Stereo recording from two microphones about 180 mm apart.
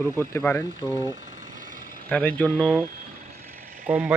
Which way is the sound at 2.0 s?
5° left (ahead or behind).